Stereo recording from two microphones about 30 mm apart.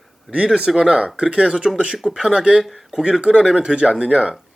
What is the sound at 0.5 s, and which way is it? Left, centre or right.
Speech, right.